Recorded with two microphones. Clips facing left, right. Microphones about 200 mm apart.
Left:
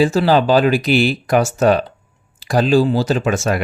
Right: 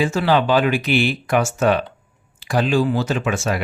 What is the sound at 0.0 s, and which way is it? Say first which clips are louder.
Speech: left 4 dB; 35° left (ahead or behind).